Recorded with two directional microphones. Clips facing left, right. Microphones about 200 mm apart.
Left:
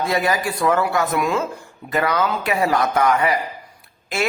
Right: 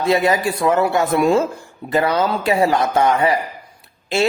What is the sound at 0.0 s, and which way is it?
Speech, 25° right (ahead or behind).